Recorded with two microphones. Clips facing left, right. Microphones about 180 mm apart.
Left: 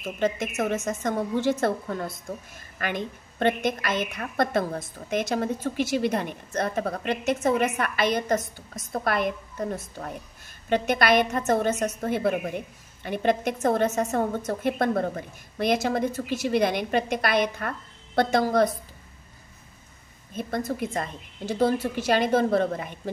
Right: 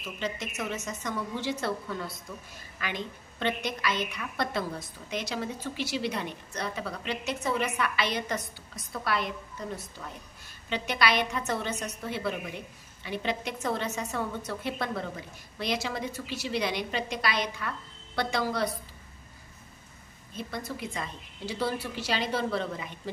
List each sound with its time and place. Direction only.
0.0 s a woman's voice: 50° left (ahead or behind)
20.3 s a woman's voice: 50° left (ahead or behind)